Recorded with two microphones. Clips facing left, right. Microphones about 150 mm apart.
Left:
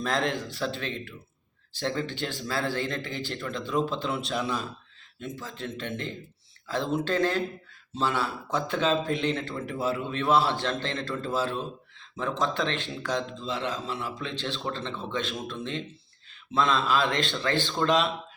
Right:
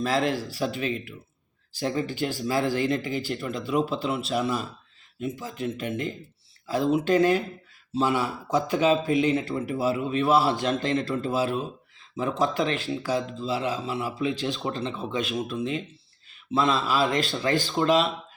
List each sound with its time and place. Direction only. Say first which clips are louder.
0.0 s speech: right 3 dB; 5° right (ahead or behind)